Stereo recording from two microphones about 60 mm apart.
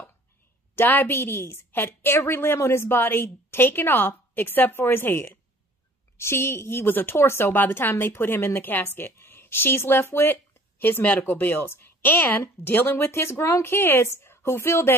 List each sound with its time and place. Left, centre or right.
0.7 s a woman's voice: left